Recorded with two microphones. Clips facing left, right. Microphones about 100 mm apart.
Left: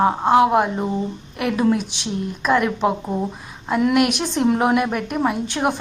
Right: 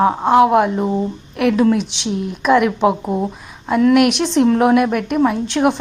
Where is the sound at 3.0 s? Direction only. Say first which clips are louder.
Right 4 dB; 20° right (ahead or behind).